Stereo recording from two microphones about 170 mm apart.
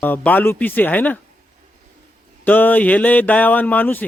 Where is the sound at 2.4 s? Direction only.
10° left (ahead or behind).